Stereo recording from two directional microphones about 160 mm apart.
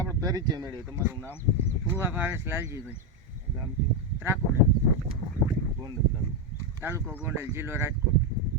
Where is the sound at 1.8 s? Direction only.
10° right (ahead or behind).